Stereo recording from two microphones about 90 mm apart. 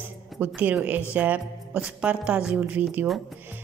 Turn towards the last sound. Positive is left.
turn(degrees=-20)  # may be behind; listen again after turning